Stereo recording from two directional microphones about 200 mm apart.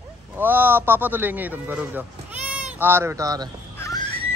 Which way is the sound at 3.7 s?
15° left (ahead or behind).